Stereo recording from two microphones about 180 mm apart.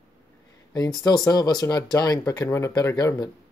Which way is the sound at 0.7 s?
20° left (ahead or behind).